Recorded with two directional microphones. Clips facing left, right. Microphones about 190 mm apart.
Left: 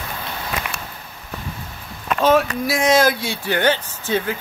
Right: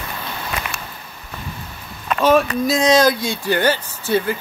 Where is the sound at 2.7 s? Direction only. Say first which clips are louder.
Right 2 dB; 20° right (ahead or behind).